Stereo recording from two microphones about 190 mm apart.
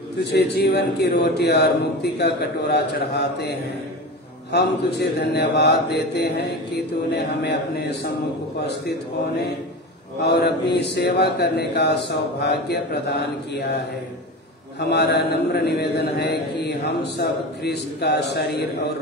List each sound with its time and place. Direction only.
0.3 s mantra: 60° left (ahead or behind)
10.2 s mantra: 60° left (ahead or behind)
14.8 s mantra: 60° left (ahead or behind)